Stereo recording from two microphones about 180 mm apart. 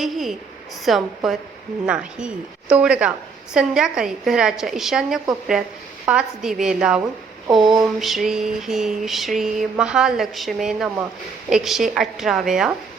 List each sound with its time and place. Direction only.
0.0 s mantra: centre (ahead or behind)
7.6 s a sound: 25° right (ahead or behind)
7.9 s mantra: centre (ahead or behind)